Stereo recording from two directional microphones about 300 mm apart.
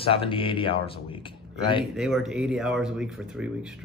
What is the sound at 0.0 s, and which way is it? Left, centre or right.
Speech, centre.